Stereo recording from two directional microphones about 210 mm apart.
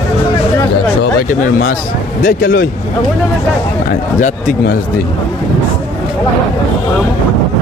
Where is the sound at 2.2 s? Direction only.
45° left (ahead or behind).